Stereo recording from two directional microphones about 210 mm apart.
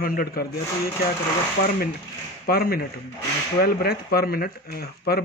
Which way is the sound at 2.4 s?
45° left (ahead or behind).